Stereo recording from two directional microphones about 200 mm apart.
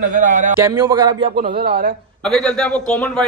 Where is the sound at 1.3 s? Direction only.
50° right (ahead or behind).